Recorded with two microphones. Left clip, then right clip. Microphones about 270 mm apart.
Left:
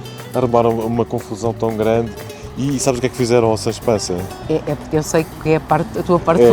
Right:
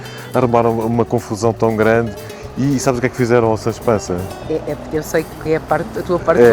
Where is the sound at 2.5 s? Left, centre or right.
Right.